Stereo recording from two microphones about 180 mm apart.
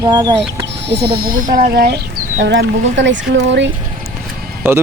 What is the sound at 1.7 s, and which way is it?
Speech, 60° right (ahead or behind).